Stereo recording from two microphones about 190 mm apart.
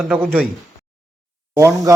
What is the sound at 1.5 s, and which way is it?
Speech, 15° right (ahead or behind).